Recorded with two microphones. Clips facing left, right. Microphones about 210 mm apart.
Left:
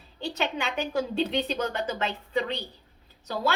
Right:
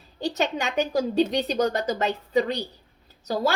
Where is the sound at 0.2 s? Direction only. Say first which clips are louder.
Right 4 dB; 40° right (ahead or behind).